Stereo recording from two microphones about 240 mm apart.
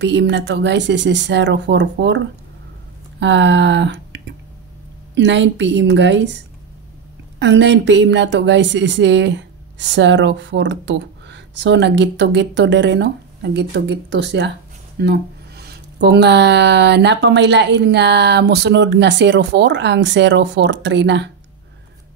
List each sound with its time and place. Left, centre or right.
0.0 s a woman's voice: right
3.2 s a sound: right
5.1 s a woman's voice: right
7.3 s a woman's voice: right